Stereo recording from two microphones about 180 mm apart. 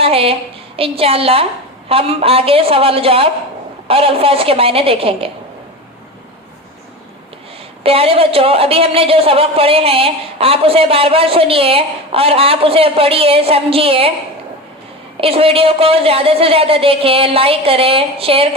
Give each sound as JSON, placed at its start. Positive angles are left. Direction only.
{"t": 0.0, "sound": "a woman's voice", "side_deg": -30}
{"t": 7.9, "sound": "a woman's voice", "side_deg": -30}
{"t": 15.2, "sound": "a woman's voice", "side_deg": -30}